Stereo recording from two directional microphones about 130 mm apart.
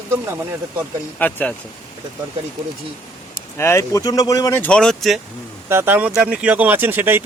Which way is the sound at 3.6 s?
20° left (ahead or behind).